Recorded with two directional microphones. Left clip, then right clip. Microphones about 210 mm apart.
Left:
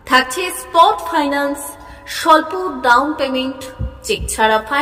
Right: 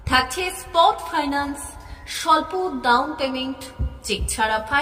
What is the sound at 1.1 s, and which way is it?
Music, 15° left (ahead or behind).